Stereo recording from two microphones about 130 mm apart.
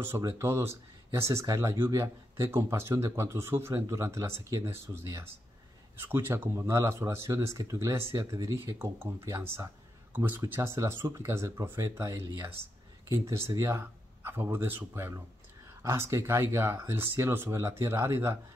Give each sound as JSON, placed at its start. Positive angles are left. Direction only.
{"t": 0.0, "sound": "speech", "side_deg": -20}